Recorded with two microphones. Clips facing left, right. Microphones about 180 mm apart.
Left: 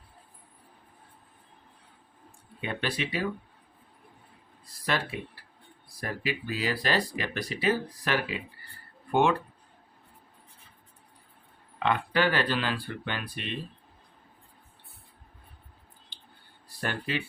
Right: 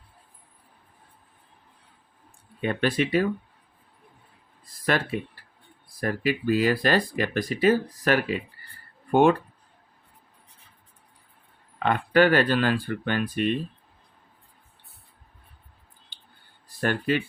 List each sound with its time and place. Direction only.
2.6 s speech: 50° right (ahead or behind)
4.6 s a sound: 50° right (ahead or behind)
6.0 s speech: 50° right (ahead or behind)
11.8 s speech: 50° right (ahead or behind)
16.6 s speech: 50° right (ahead or behind)